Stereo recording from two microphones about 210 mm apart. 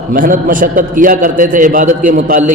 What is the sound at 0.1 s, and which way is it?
A man's voice, 40° right (ahead or behind).